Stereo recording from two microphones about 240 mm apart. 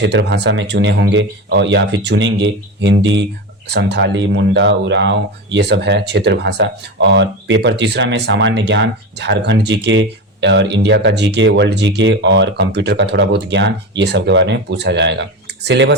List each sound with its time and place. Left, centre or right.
0.0 s speech: right